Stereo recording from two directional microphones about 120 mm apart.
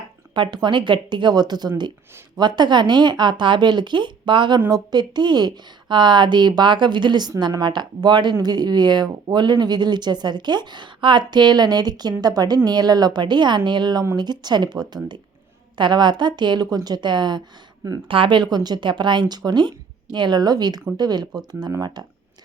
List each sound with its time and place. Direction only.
0.3 s speech: 40° right (ahead or behind)